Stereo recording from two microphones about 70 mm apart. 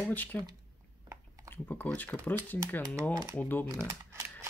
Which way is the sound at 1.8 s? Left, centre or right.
Left.